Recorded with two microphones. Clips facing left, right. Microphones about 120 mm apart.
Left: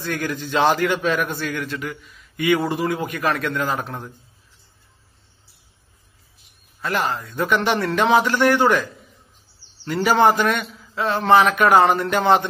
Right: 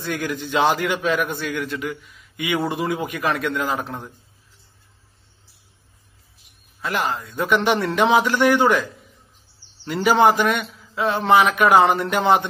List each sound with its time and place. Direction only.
0.0 s a man's voice: 15° right (ahead or behind)
7.3 s a man's voice: 15° right (ahead or behind)
9.8 s a man's voice: 15° right (ahead or behind)